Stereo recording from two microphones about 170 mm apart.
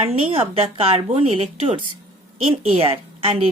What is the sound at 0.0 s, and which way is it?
Speech, 35° right (ahead or behind).